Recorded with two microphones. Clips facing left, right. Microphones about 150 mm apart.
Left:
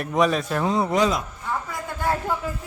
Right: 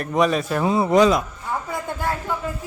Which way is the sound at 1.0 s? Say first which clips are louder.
Right 8 dB; 70° right (ahead or behind).